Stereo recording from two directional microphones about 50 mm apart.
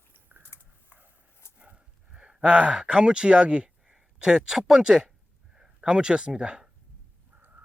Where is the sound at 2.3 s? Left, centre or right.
Centre.